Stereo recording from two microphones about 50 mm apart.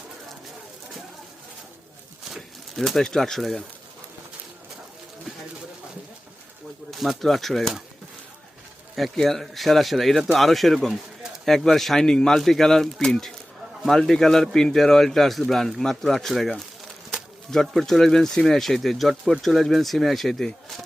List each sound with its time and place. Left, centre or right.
2.3 s speech: centre
6.9 s a man's voice: centre
9.0 s a man's voice: centre